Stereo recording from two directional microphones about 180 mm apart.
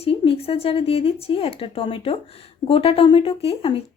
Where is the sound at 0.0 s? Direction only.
30° left (ahead or behind).